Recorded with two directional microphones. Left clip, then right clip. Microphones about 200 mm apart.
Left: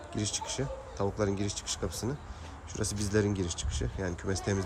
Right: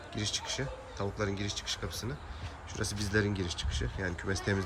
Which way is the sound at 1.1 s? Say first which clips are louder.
Left 3 dB; 15° left (ahead or behind).